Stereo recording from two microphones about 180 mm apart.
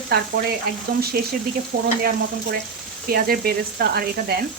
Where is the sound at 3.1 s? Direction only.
60° right (ahead or behind).